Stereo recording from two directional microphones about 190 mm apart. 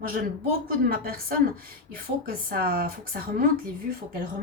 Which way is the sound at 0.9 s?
50° right (ahead or behind).